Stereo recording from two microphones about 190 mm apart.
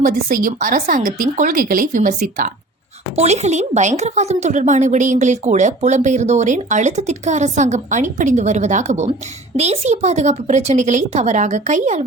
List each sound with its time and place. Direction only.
0.0 s a woman's voice: 45° right (ahead or behind)